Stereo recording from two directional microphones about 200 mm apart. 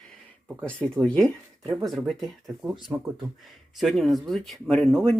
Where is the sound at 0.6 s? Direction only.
5° left (ahead or behind).